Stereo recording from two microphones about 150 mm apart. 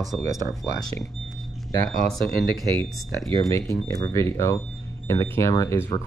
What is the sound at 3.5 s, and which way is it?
Speech, 25° left (ahead or behind).